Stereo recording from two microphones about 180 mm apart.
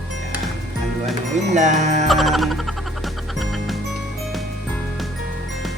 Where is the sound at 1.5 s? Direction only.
40° right (ahead or behind).